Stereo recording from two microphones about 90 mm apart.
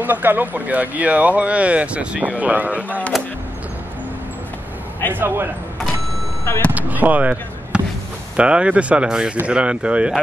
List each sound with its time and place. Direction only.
0.0 s speech: 20° right (ahead or behind)
3.1 s a sound: centre (ahead or behind)
5.1 s speech: 25° right (ahead or behind)
6.7 s speech: 20° right (ahead or behind)